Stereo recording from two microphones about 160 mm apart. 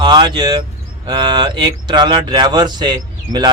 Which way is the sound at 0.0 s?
30° right (ahead or behind).